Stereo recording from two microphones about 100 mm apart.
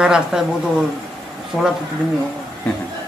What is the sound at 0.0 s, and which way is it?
Speech, 5° right (ahead or behind).